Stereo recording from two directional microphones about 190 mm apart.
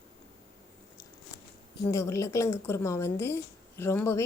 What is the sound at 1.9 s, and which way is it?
A woman's voice, 15° left (ahead or behind).